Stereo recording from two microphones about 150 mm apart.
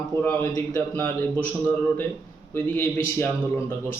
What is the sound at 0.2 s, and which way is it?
Speech, 15° left (ahead or behind).